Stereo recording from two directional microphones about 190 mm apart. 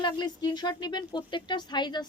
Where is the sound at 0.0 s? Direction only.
20° left (ahead or behind).